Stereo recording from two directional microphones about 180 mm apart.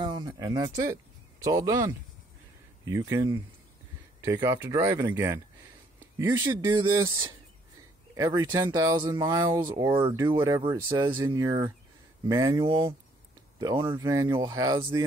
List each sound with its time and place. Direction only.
0.0 s a sound: 25° right (ahead or behind)
0.3 s speech: 20° right (ahead or behind)
8.1 s speech: 20° right (ahead or behind)